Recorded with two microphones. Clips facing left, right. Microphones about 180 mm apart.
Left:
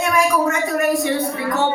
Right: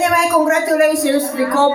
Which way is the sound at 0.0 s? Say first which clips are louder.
Right 3 dB; 85° right.